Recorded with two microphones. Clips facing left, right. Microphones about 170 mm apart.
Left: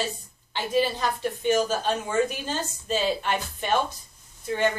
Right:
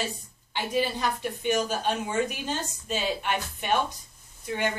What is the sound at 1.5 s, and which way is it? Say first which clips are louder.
Speech: left 3 dB; 15° right (ahead or behind).